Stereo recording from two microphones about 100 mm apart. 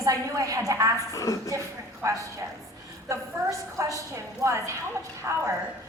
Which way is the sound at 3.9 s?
30° right (ahead or behind).